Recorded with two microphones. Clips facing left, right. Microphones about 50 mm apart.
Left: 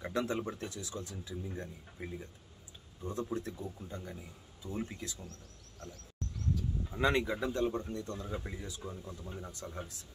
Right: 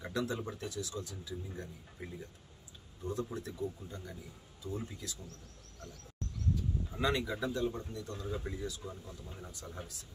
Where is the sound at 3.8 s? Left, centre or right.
Left.